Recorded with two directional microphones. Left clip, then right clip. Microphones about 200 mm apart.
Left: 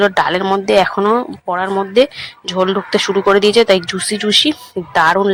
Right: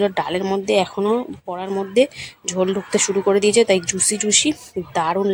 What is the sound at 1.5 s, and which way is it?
Speech, centre (ahead or behind).